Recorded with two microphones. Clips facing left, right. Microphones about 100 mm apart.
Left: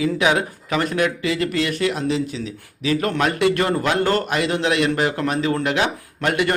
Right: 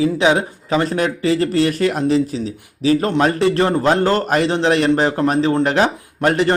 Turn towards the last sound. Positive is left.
turn(degrees=-35)  # may be behind; listen again after turning